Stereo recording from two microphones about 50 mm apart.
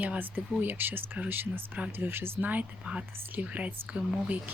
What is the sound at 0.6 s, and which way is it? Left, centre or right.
Speech, right.